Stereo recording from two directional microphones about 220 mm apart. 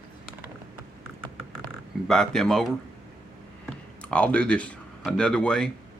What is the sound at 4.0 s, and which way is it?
Speech, 5° left (ahead or behind).